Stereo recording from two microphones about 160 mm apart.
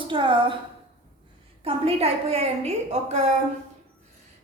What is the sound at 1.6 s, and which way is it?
A woman's voice, 40° right (ahead or behind).